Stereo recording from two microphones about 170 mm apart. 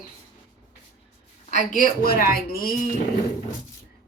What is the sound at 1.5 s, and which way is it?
A woman's voice, 50° left (ahead or behind).